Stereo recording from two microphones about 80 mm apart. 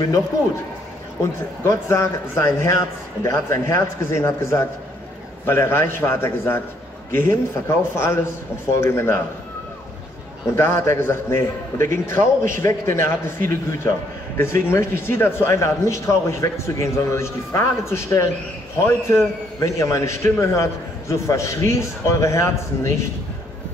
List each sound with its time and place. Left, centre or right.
1.2 s a man's voice: left
10.4 s a man's voice: left